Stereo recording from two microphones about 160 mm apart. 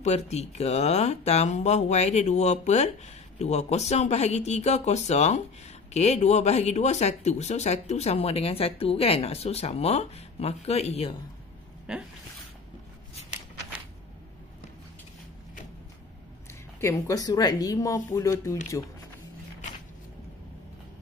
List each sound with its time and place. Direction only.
0.0 s speech: 45° left (ahead or behind)
11.9 s speech: 5° right (ahead or behind)
16.8 s speech: 20° left (ahead or behind)